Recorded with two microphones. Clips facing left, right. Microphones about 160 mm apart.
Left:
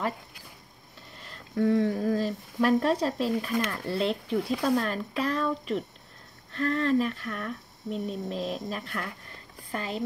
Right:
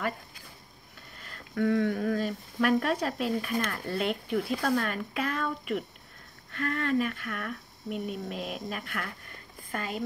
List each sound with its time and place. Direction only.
1.2 s speech: 25° left (ahead or behind)